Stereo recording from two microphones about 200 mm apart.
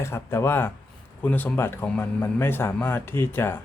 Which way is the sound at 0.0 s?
10° left (ahead or behind).